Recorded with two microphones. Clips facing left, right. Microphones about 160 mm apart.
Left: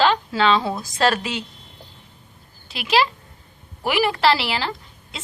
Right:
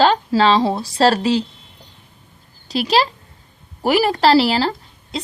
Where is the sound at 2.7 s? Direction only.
35° right (ahead or behind).